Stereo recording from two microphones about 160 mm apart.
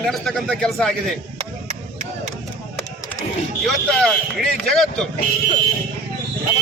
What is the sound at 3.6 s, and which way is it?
A man's voice, centre (ahead or behind).